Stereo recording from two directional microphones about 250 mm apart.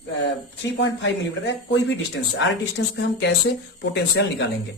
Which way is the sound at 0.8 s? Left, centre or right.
Left.